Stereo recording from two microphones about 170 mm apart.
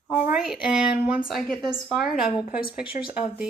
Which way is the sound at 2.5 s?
60° left (ahead or behind).